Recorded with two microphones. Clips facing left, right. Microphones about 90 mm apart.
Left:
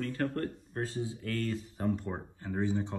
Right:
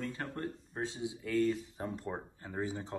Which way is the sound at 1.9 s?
Centre (ahead or behind).